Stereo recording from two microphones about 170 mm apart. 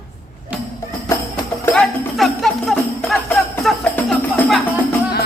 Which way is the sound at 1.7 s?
Centre (ahead or behind).